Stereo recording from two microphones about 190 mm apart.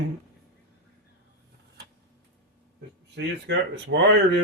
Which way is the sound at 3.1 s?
65° right (ahead or behind).